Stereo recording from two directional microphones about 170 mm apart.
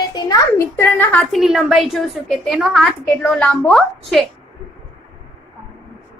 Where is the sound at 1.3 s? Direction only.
Centre (ahead or behind).